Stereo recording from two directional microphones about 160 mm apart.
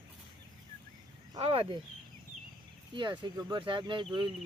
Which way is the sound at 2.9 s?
30° right (ahead or behind).